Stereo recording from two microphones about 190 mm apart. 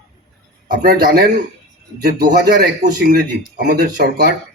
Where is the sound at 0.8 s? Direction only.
55° right (ahead or behind).